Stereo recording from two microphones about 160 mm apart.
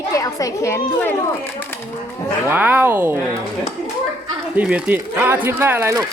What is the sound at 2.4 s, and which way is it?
Speech, 10° right (ahead or behind).